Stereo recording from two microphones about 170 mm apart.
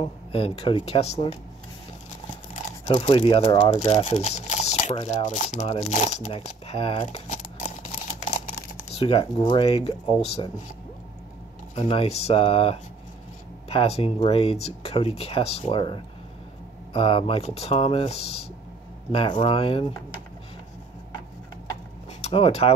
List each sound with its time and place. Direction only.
0.0 s speech: 35° left (ahead or behind)
2.9 s speech: 30° left (ahead or behind)
8.9 s speech: 35° left (ahead or behind)
11.7 s speech: 35° left (ahead or behind)
19.4 s speech: 30° left (ahead or behind)
22.2 s speech: 35° left (ahead or behind)